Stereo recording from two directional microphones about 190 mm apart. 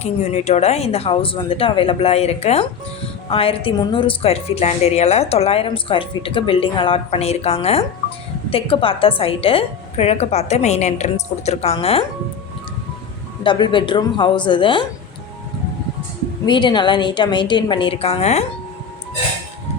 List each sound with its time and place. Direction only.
0.0 s speech: 35° left (ahead or behind)
13.4 s a woman's voice: 25° left (ahead or behind)
16.5 s a woman's voice: 25° left (ahead or behind)